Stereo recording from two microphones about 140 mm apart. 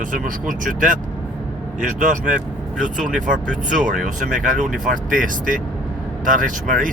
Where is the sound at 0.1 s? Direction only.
70° right (ahead or behind).